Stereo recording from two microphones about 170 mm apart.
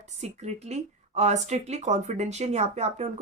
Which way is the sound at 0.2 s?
40° right (ahead or behind).